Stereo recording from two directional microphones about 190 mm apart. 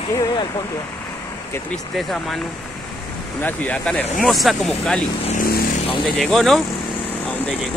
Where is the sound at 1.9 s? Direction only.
Centre (ahead or behind).